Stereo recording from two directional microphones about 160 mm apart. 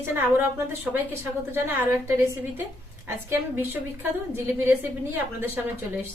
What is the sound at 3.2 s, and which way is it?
A woman's voice, 15° right (ahead or behind).